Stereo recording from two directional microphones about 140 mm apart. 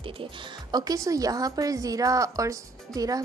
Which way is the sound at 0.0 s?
35° right (ahead or behind).